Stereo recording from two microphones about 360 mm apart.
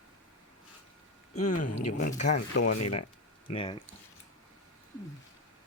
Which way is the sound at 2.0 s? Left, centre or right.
Left.